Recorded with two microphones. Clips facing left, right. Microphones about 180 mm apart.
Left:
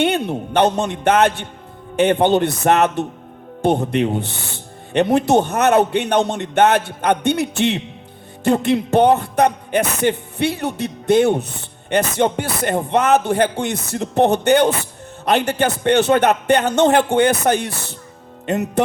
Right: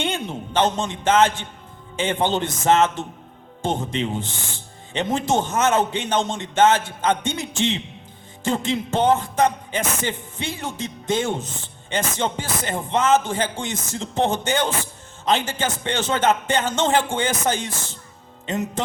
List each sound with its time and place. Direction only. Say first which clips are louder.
0.0 s a man's voice: left 8 dB; 65° left (ahead or behind)